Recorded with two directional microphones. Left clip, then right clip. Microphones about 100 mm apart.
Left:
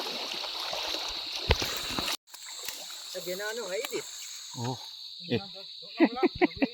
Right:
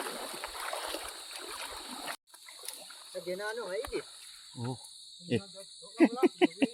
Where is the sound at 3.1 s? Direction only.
90° left.